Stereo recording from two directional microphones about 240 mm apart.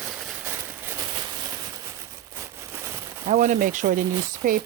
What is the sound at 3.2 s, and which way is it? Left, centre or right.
Sizzle, right.